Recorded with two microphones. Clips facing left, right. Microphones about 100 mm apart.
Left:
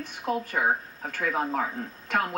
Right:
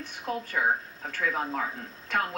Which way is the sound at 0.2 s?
20° left (ahead or behind).